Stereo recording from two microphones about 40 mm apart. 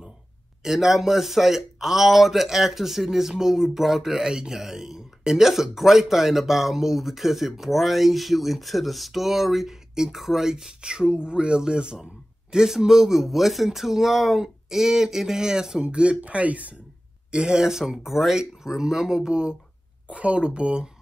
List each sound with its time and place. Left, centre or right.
0.6 s speech: centre
15.8 s speech: right
17.3 s speech: right; by 18.3 s centre
18.3 s speech: centre
20.1 s speech: right